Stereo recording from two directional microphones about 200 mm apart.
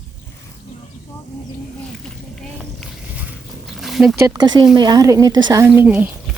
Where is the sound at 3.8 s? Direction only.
Centre (ahead or behind).